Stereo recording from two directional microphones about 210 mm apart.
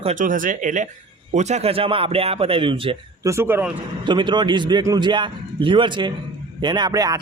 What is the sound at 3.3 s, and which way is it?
Speech, 10° right (ahead or behind).